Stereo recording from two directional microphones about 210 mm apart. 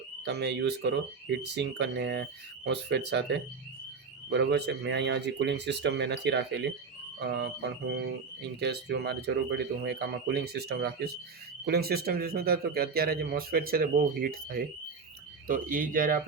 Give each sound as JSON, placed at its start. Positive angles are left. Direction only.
{"t": 0.3, "sound": "speech", "side_deg": -55}